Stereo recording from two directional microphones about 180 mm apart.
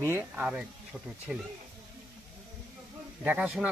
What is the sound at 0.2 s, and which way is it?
Speech, 5° right (ahead or behind).